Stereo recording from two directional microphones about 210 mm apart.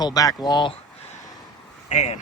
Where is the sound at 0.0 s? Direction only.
15° left (ahead or behind).